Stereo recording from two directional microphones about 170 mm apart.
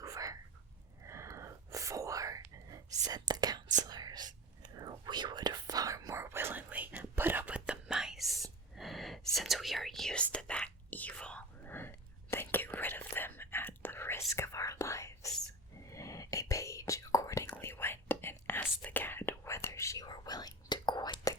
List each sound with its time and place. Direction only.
0.0 s whispering: 20° right (ahead or behind); by 8.4 s centre (ahead or behind)
8.7 s a sound: centre (ahead or behind)
9.3 s whispering: centre (ahead or behind); by 21.3 s 25° left (ahead or behind)